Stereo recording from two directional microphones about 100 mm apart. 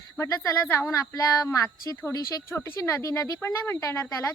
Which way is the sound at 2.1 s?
40° left (ahead or behind).